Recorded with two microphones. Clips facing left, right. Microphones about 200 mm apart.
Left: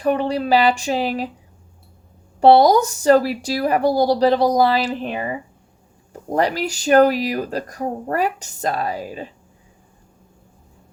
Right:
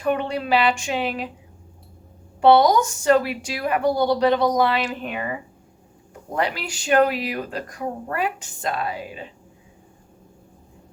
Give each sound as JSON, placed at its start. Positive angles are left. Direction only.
{"t": 0.0, "sound": "speech", "side_deg": 35}
{"t": 2.4, "sound": "speech", "side_deg": 35}